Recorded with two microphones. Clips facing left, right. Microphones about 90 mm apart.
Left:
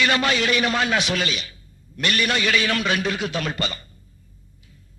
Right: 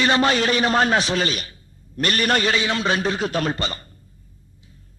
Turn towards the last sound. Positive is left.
turn(degrees=-35)  # may be behind; listen again after turning